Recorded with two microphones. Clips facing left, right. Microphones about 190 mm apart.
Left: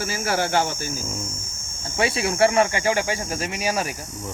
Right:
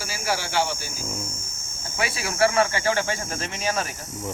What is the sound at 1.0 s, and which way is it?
Speech, 10° left (ahead or behind).